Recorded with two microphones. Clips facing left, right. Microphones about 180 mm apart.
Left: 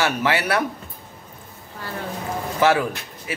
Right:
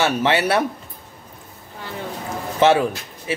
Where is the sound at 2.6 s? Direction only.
25° right (ahead or behind).